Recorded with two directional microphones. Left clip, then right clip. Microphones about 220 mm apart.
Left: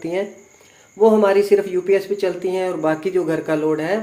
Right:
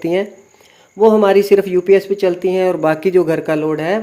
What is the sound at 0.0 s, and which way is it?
Speech, 45° right (ahead or behind).